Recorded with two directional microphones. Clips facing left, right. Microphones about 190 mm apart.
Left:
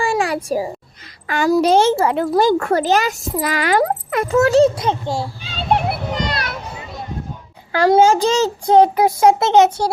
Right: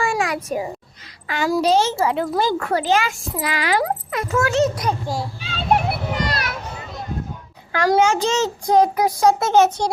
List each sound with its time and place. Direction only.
0.0 s a sound: 30° left (ahead or behind)
1.3 s a child's voice: 45° left (ahead or behind)
4.3 s a child's voice: 30° left (ahead or behind)
5.7 s children playing: 5° right (ahead or behind)
7.7 s a child's voice: 30° left (ahead or behind)
9.6 s a child's voice: 10° left (ahead or behind)